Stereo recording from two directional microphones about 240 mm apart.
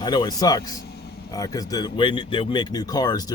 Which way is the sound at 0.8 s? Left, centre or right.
Left.